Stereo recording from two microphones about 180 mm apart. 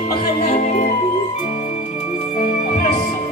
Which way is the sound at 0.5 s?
40° left (ahead or behind).